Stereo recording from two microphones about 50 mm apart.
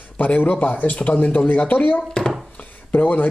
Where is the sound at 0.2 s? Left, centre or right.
Left.